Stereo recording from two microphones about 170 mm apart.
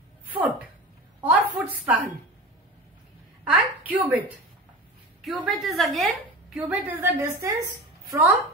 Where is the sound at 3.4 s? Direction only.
10° right (ahead or behind).